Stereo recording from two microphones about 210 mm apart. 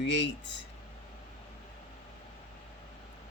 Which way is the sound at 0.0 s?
55° left (ahead or behind).